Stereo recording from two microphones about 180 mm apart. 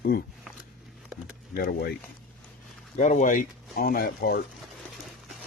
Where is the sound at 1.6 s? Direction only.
55° left (ahead or behind).